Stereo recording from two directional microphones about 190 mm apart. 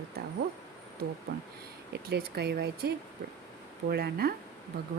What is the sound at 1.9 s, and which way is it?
Speech, 60° right (ahead or behind).